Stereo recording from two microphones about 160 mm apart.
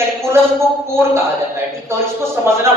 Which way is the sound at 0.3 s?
15° right (ahead or behind).